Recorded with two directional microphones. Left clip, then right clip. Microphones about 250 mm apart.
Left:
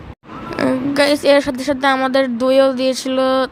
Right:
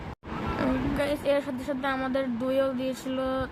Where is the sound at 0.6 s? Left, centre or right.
Left.